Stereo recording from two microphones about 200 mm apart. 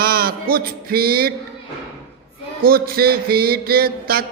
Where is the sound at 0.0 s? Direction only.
50° right (ahead or behind).